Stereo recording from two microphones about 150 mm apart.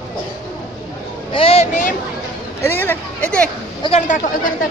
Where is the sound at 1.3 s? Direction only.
40° left (ahead or behind).